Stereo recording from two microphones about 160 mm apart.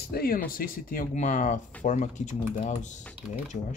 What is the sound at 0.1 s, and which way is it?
Speech, 70° left (ahead or behind).